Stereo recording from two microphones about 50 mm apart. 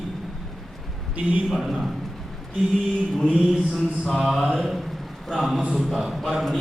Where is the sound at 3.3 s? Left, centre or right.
Centre.